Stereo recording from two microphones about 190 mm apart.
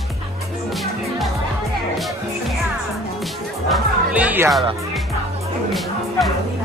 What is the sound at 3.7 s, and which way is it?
Music, 5° right (ahead or behind).